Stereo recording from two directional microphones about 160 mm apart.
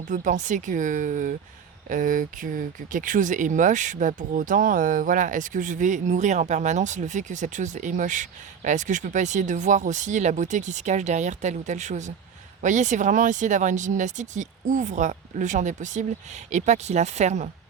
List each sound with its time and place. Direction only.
0.1 s speech: 50° right (ahead or behind)